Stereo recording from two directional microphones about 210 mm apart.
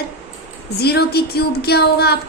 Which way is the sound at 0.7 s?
50° left (ahead or behind).